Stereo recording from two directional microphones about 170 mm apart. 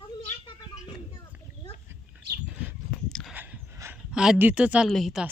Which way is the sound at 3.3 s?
10° right (ahead or behind).